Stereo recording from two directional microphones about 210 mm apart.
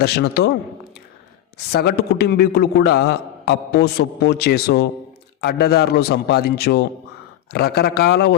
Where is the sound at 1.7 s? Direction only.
50° left (ahead or behind).